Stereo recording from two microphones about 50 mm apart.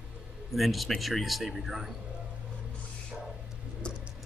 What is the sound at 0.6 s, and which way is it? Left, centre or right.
A man's voice, centre.